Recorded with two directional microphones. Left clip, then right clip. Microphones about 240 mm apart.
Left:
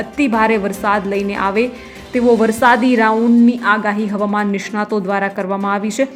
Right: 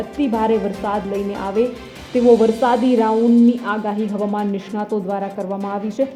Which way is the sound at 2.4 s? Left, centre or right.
Centre.